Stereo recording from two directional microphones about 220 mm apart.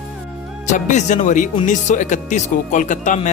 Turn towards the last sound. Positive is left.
turn(degrees=35)  # may be behind; listen again after turning